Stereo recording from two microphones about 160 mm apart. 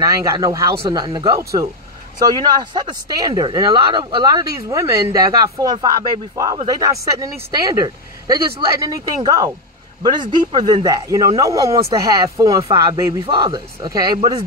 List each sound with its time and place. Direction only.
0.0 s speech: 20° right (ahead or behind)